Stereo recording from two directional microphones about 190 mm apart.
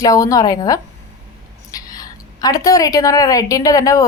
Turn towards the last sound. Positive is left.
turn(degrees=15)  # may be behind; listen again after turning